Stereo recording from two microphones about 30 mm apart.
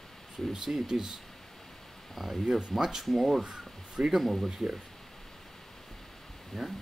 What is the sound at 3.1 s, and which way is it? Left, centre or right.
Speech, centre.